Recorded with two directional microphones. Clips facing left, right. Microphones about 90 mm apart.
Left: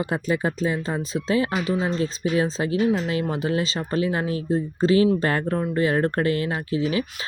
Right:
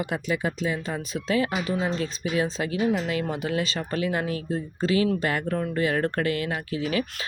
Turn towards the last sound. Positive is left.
turn(degrees=25)  # may be behind; listen again after turning